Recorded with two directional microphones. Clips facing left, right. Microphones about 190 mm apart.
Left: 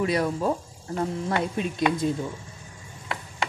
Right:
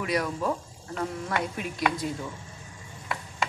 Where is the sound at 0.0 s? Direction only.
30° left (ahead or behind).